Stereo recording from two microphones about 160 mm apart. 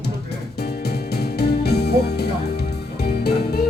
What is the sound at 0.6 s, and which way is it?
Music, 90° left.